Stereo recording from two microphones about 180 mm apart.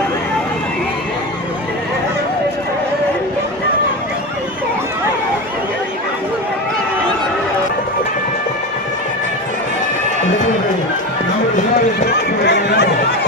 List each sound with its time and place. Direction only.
12.4 s run: 70° left (ahead or behind)